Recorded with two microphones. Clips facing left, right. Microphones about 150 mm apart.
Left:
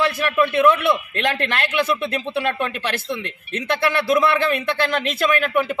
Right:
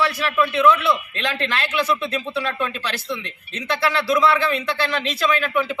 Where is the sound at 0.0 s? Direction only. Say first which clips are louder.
Left 2 dB; 50° left (ahead or behind).